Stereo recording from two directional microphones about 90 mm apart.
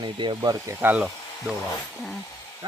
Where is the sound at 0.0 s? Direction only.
60° right (ahead or behind).